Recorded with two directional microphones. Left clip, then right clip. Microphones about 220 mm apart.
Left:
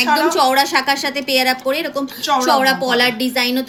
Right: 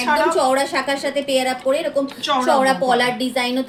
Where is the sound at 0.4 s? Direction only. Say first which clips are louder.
Left 4 dB; 40° left (ahead or behind).